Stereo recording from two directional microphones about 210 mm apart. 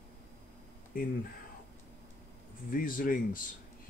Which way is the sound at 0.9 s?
45° left (ahead or behind).